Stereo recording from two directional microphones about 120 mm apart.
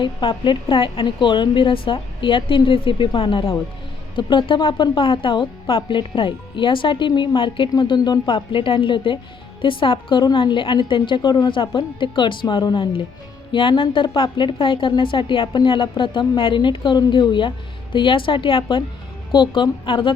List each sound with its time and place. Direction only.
0.0 s a woman's voice: 40° left (ahead or behind)